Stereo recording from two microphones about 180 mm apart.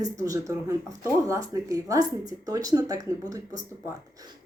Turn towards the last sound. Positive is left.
turn(degrees=-20)  # may be behind; listen again after turning